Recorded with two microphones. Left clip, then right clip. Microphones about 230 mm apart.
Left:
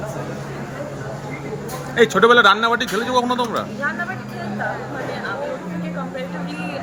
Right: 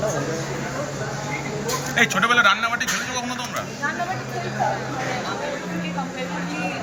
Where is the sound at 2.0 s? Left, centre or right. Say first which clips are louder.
Left 5 dB; left.